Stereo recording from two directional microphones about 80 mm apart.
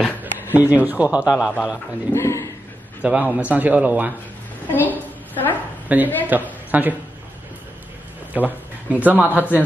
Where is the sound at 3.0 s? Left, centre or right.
Centre.